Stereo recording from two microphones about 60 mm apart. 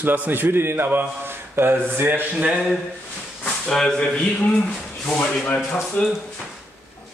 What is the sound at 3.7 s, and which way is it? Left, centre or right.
Speech, centre.